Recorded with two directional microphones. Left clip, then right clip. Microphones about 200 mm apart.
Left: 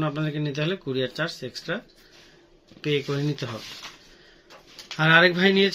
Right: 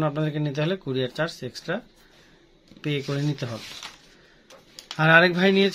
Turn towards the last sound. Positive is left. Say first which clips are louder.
# left 1 dB
turn(degrees=-45)  # may be behind; listen again after turning